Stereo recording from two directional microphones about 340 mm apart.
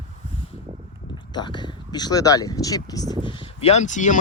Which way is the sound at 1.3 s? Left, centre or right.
Centre.